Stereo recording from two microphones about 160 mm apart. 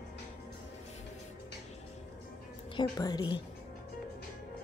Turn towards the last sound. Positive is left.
turn(degrees=25)  # may be behind; listen again after turning